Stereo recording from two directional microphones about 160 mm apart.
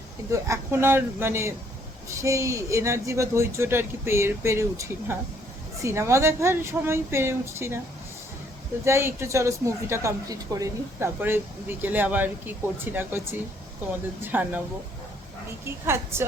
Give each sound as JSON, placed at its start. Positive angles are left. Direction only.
{"t": 0.3, "sound": "a woman's voice", "side_deg": -20}
{"t": 8.8, "sound": "a woman's voice", "side_deg": -15}
{"t": 15.6, "sound": "a woman's voice", "side_deg": -15}